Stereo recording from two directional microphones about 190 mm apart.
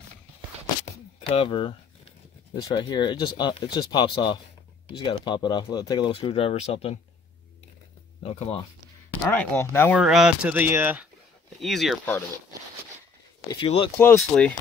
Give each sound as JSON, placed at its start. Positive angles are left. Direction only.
{"t": 1.3, "sound": "speech", "side_deg": 30}
{"t": 8.2, "sound": "speech", "side_deg": 30}
{"t": 9.2, "sound": "speech", "side_deg": 10}
{"t": 9.9, "sound": "speech", "side_deg": 0}
{"t": 11.6, "sound": "speech", "side_deg": 0}
{"t": 13.5, "sound": "speech", "side_deg": 25}
{"t": 14.1, "sound": "speech", "side_deg": 5}